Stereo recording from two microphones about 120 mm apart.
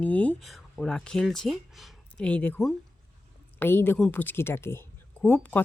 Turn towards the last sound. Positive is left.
turn(degrees=10)  # may be behind; listen again after turning